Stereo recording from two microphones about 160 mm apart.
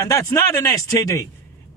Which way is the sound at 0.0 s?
20° left (ahead or behind).